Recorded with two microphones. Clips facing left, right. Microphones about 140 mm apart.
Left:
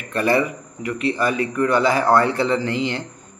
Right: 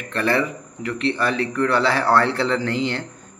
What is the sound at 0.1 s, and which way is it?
A man's voice, 15° left (ahead or behind).